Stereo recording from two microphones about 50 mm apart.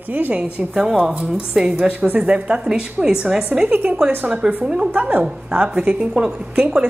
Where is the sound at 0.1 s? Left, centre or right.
Right; by 3.4 s centre.